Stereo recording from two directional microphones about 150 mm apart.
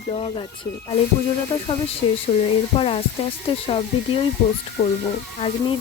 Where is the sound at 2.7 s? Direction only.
40° left (ahead or behind).